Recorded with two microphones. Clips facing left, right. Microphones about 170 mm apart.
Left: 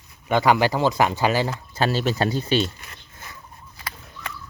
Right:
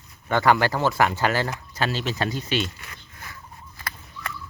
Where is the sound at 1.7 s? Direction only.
35° left (ahead or behind).